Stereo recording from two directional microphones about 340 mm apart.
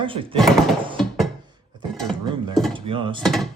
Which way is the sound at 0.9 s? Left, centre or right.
Centre.